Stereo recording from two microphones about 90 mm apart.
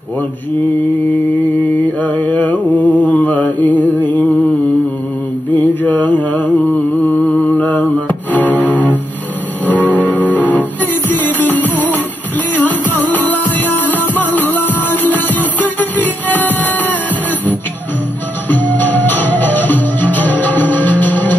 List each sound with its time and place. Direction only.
2.0 s music: 20° left (ahead or behind)
3.1 s mantra: 20° left (ahead or behind)
5.7 s mantra: 20° left (ahead or behind)
7.3 s music: 20° left (ahead or behind)
9.7 s music: 20° left (ahead or behind)
18.5 s music: 20° left (ahead or behind)